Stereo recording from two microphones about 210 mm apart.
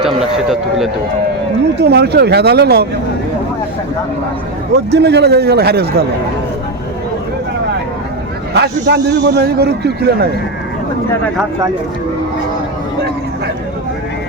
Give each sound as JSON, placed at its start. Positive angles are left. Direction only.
{"t": 0.0, "sound": "a man's voice", "side_deg": 0}
{"t": 1.8, "sound": "a man's voice", "side_deg": -50}
{"t": 4.7, "sound": "a man's voice", "side_deg": -55}
{"t": 8.5, "sound": "a man's voice", "side_deg": -50}